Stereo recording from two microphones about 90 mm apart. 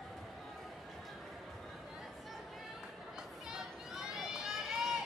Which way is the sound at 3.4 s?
5° right (ahead or behind).